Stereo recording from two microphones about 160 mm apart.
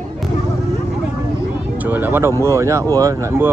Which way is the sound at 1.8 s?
10° right (ahead or behind).